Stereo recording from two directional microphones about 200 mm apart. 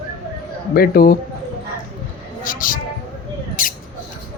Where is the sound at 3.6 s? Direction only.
45° left (ahead or behind).